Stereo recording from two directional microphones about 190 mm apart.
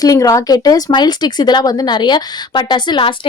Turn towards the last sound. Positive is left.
turn(degrees=25)  # may be behind; listen again after turning